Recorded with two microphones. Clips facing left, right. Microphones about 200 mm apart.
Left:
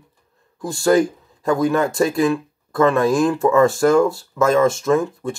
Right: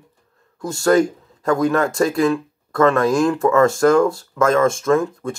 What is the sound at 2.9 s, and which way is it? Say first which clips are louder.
Speech: even; 5° left (ahead or behind).